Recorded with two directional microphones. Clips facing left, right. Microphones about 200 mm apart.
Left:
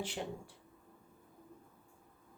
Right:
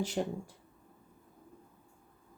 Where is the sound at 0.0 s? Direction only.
40° right (ahead or behind).